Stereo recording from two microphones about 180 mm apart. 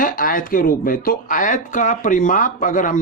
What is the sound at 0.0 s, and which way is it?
Speech, 50° left (ahead or behind).